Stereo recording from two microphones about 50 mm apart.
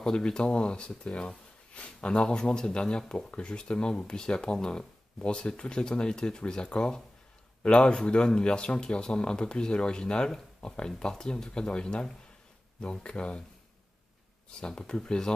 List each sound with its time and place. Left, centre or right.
0.0 s speech: centre
14.6 s speech: centre